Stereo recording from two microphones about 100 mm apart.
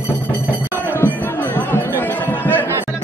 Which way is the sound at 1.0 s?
20° left (ahead or behind).